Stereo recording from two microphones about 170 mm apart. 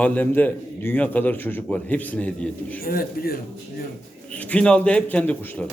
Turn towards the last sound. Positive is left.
turn(degrees=10)  # may be behind; listen again after turning